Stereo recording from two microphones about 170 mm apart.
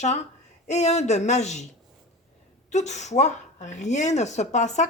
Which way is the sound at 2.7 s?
40° left (ahead or behind).